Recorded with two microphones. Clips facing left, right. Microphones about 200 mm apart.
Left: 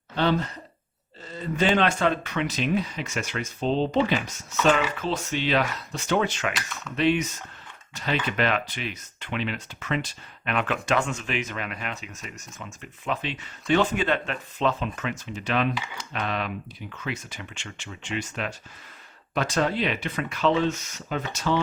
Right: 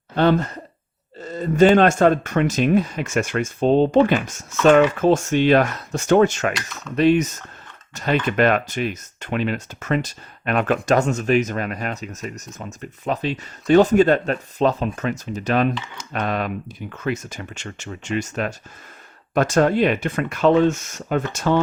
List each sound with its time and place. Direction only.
0.2 s speech: 50° right (ahead or behind)
6.5 s speech: centre (ahead or behind)
6.9 s speech: 40° right (ahead or behind)